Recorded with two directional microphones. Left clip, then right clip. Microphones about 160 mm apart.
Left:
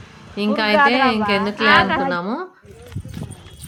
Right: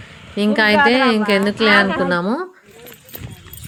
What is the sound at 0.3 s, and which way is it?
A woman's voice, 30° right (ahead or behind).